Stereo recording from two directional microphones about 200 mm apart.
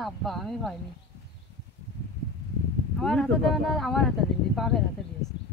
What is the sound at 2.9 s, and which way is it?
Speech, 5° left (ahead or behind).